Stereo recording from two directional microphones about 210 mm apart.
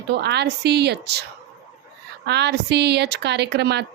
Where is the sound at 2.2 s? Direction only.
55° right (ahead or behind).